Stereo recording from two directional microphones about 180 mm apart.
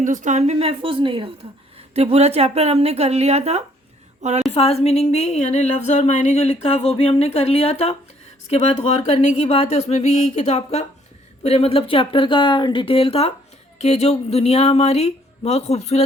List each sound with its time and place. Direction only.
0.0 s a woman's voice: 45° right (ahead or behind)
4.5 s speech: 35° left (ahead or behind)